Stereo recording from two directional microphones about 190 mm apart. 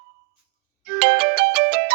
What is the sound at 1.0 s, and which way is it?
Music, 60° right (ahead or behind).